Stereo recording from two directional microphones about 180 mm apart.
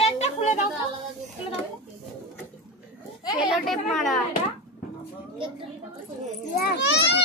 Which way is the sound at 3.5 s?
Centre (ahead or behind).